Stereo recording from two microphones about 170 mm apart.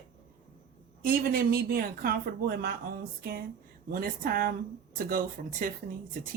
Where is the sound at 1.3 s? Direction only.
60° right (ahead or behind).